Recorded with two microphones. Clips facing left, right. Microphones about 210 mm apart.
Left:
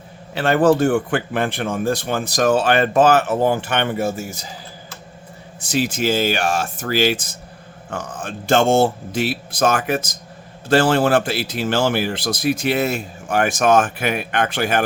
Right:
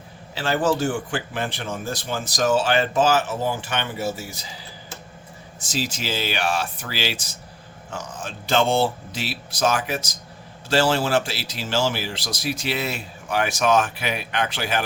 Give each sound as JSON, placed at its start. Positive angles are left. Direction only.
{"t": 0.3, "sound": "speech", "side_deg": 60}
{"t": 5.5, "sound": "speech", "side_deg": 60}